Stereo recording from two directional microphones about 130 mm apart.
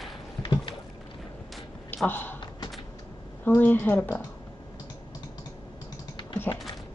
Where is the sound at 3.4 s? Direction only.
15° left (ahead or behind).